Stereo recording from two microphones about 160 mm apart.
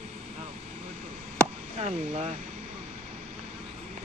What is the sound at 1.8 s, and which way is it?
Speech, 45° right (ahead or behind).